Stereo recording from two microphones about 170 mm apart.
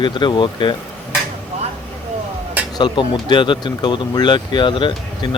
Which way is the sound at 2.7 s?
25° left (ahead or behind).